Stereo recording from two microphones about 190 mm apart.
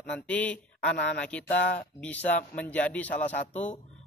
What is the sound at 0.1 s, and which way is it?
A man's voice, 5° left (ahead or behind).